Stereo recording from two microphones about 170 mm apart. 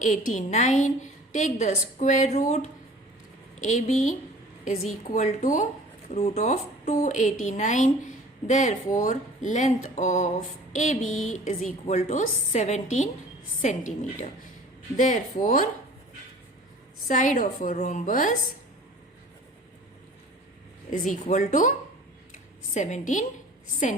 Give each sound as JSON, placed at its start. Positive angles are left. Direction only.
{"t": 0.0, "sound": "a woman's voice", "side_deg": 50}
{"t": 17.1, "sound": "a woman's voice", "side_deg": 50}
{"t": 20.9, "sound": "a woman's voice", "side_deg": 50}
{"t": 22.3, "sound": "a sound", "side_deg": 45}